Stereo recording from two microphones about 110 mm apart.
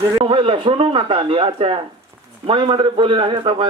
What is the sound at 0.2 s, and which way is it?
A man's voice, 55° right (ahead or behind).